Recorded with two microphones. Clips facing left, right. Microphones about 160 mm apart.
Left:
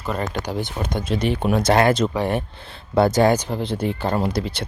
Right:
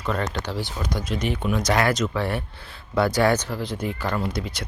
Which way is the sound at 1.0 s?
30° left (ahead or behind).